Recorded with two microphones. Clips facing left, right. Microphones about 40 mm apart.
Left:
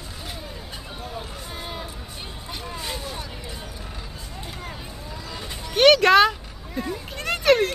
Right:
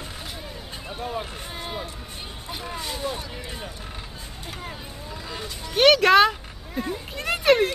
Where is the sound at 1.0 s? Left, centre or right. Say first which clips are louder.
Right 6 dB; right.